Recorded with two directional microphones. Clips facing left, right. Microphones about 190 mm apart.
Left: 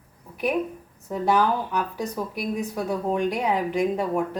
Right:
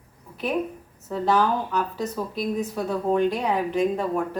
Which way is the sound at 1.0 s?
15° left (ahead or behind).